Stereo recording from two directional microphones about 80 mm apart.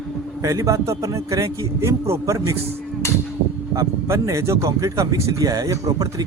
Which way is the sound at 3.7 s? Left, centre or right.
Right.